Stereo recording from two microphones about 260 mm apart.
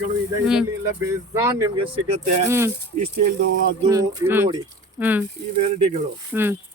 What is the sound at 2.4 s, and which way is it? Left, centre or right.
Speech, centre.